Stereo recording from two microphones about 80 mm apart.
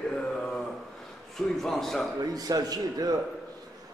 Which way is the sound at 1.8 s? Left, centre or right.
Centre.